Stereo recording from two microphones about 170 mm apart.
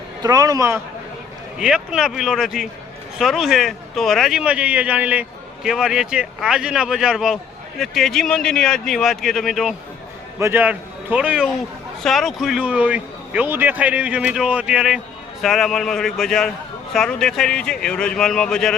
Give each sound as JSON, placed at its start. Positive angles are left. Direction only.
{"t": 0.2, "sound": "a man's voice", "side_deg": -20}
{"t": 1.5, "sound": "a man's voice", "side_deg": -5}
{"t": 10.4, "sound": "a man's voice", "side_deg": -10}